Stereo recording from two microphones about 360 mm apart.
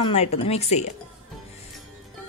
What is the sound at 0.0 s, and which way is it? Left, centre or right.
Speech, centre.